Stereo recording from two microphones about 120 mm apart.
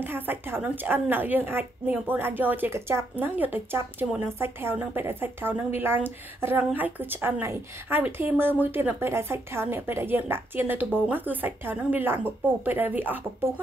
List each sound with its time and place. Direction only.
0.0 s a woman's voice: 15° right (ahead or behind)